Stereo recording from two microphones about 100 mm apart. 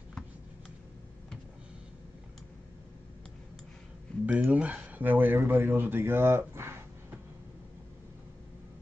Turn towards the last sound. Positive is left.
turn(degrees=-25)  # may be behind; listen again after turning